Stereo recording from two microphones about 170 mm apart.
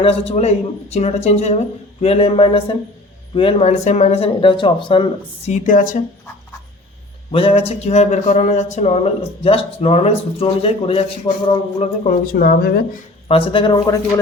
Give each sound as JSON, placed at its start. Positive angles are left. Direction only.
{"t": 0.0, "sound": "speech", "side_deg": 35}
{"t": 7.3, "sound": "a man's voice", "side_deg": 30}
{"t": 12.0, "sound": "speech", "side_deg": 60}
{"t": 13.2, "sound": "speech", "side_deg": 35}